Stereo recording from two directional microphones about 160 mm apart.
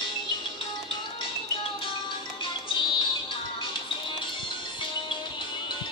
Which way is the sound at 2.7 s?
30° left (ahead or behind).